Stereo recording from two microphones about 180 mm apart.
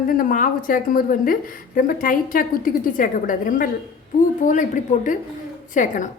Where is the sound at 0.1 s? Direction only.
50° left (ahead or behind).